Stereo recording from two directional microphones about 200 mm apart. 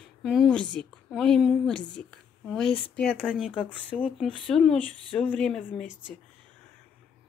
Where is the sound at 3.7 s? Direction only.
5° left (ahead or behind).